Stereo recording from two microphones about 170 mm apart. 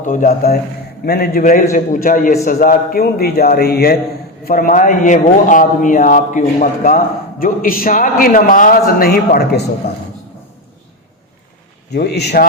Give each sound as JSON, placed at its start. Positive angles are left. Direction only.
{"t": 0.0, "sound": "a man's voice", "side_deg": 50}
{"t": 4.4, "sound": "a man's voice", "side_deg": 55}
{"t": 11.9, "sound": "a man's voice", "side_deg": 75}